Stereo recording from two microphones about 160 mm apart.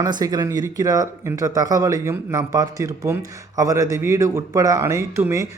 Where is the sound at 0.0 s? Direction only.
25° right (ahead or behind).